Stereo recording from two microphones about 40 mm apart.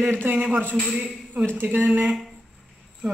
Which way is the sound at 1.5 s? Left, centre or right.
Right.